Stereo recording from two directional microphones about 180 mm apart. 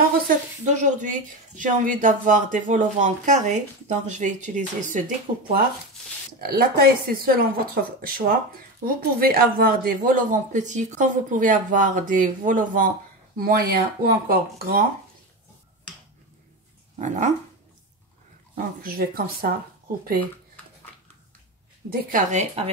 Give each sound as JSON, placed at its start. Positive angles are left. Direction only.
{"t": 0.8, "sound": "a woman's voice", "side_deg": -45}
{"t": 17.0, "sound": "speech", "side_deg": -45}
{"t": 18.5, "sound": "a woman's voice", "side_deg": -55}
{"t": 22.1, "sound": "a woman's voice", "side_deg": -40}